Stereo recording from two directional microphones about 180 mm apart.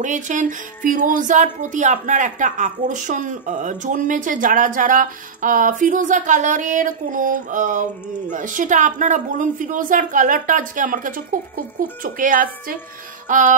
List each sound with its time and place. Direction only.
0.0 s speech: 45° right (ahead or behind)